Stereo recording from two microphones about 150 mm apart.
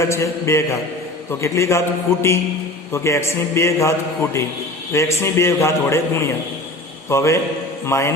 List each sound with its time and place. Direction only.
0.0 s a man's voice: 20° left (ahead or behind)